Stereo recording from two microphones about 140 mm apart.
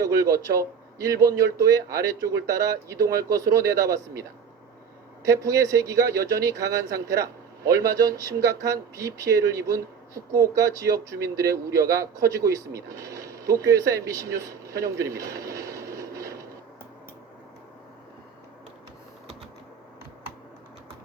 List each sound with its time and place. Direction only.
0.0 s speech: 25° right (ahead or behind)